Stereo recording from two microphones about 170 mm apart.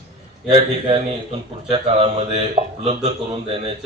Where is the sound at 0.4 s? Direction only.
35° right (ahead or behind).